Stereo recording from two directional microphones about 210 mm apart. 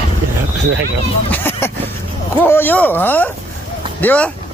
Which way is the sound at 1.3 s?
10° left (ahead or behind).